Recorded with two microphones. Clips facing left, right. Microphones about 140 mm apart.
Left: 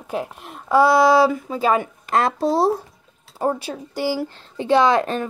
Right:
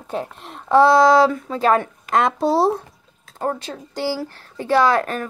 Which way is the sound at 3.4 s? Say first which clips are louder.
Left 2 dB; 10° left (ahead or behind).